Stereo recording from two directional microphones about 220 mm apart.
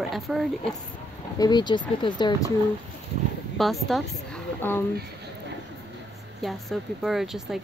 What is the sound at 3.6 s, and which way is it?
A woman's voice, centre (ahead or behind).